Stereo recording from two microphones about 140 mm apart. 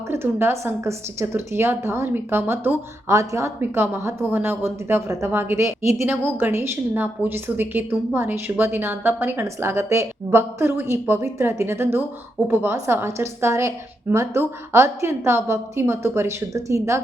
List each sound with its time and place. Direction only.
0.1 s a woman's voice: 15° right (ahead or behind)